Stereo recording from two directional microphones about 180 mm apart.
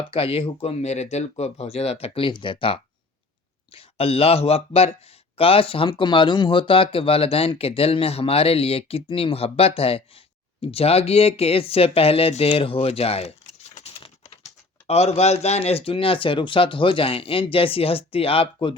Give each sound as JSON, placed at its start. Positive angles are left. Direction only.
{"t": 0.1, "sound": "speech", "side_deg": 30}